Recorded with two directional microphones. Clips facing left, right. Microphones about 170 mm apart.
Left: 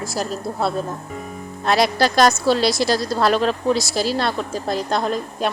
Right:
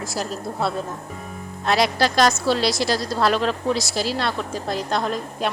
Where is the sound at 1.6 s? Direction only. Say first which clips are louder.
Left 2 dB; 40° left (ahead or behind).